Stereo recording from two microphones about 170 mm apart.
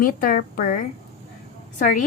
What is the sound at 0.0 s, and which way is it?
Speech, 55° left (ahead or behind).